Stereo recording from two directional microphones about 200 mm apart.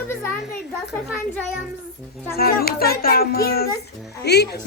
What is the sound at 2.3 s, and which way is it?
A child's voice, 50° left (ahead or behind).